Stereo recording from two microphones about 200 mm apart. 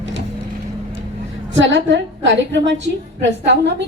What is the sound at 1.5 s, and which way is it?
A woman's voice, 65° right (ahead or behind).